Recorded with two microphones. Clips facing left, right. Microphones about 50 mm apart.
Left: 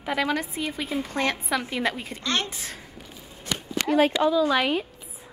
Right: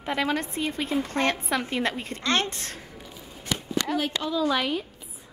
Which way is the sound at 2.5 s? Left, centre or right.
Centre.